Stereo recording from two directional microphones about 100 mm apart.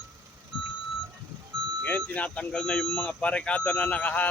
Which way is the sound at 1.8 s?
15° left (ahead or behind).